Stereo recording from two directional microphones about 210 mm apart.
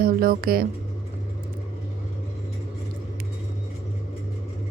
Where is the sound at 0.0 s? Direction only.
45° right (ahead or behind).